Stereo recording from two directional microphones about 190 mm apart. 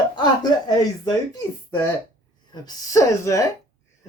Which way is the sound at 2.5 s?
20° left (ahead or behind).